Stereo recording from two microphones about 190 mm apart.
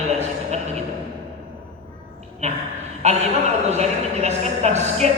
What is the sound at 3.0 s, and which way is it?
A woman's voice, 35° right (ahead or behind).